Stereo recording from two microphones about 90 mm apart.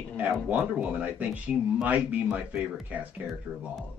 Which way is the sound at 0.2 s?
15° right (ahead or behind).